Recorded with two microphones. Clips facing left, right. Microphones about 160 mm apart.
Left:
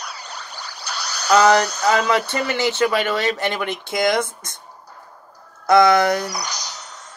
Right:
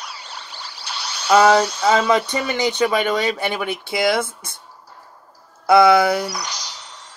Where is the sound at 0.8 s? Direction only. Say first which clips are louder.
Even; 40° left (ahead or behind).